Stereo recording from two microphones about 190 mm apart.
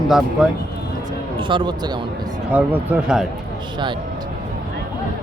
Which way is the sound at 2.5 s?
5° right (ahead or behind).